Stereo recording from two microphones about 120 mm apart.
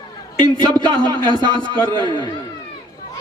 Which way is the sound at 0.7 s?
40° right (ahead or behind).